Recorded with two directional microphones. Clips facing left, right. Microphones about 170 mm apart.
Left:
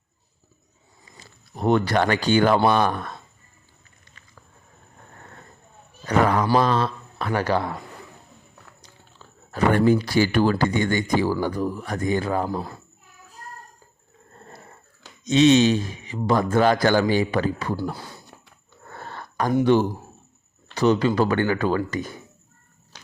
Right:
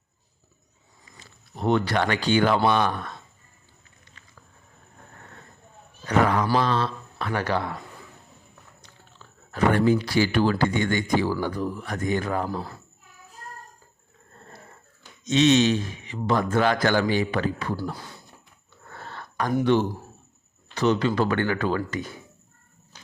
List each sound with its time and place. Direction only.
1.5 s speech: 45° left (ahead or behind)
6.1 s a man's voice: 40° left (ahead or behind)
9.5 s speech: 45° left (ahead or behind); by 12.5 s 30° left (ahead or behind)
15.2 s speech: 35° left (ahead or behind)
18.9 s a sound: 40° left (ahead or behind)
20.7 s speech: 35° left (ahead or behind)